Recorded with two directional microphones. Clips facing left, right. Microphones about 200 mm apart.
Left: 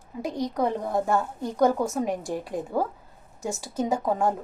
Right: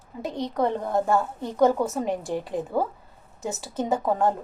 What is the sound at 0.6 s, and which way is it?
A woman's voice, centre (ahead or behind).